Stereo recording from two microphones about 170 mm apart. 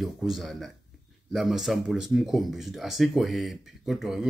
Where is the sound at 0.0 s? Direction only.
Centre (ahead or behind).